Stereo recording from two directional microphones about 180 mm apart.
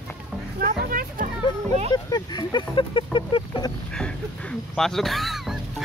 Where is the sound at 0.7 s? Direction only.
50° right (ahead or behind).